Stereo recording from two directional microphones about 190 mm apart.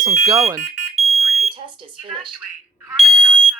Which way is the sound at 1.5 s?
25° right (ahead or behind).